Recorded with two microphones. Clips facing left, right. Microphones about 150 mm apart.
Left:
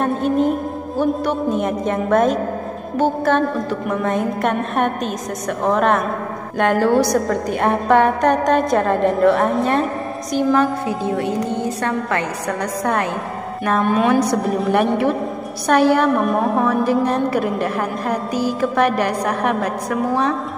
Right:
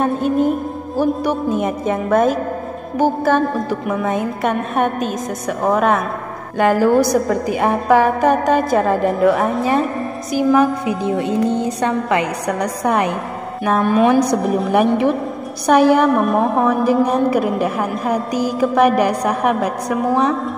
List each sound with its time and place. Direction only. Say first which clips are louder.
0.0 s a woman's voice: right 1 dB; centre (ahead or behind)
14.5 s a woman's voice: right 2 dB; 5° right (ahead or behind)